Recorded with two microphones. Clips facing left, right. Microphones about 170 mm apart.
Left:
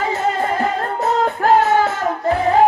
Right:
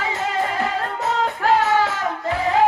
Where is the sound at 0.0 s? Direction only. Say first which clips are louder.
Left 4 dB; 45° left (ahead or behind).